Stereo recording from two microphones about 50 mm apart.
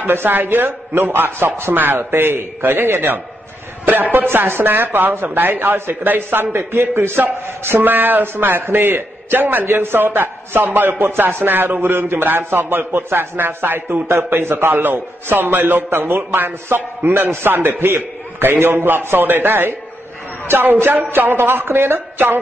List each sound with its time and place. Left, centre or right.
0.1 s a woman's voice: right